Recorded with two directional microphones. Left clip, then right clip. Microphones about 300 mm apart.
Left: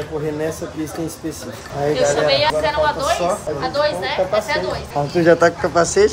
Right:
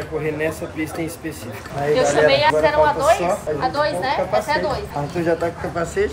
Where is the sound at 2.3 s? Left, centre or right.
Right.